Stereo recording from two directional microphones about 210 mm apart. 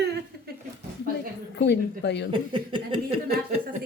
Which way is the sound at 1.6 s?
55° left (ahead or behind).